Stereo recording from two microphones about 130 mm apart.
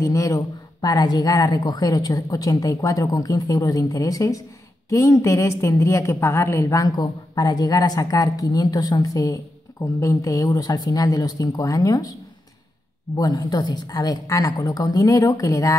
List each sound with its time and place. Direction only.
0.0 s a woman's voice: 25° left (ahead or behind)
13.2 s a woman's voice: 30° left (ahead or behind)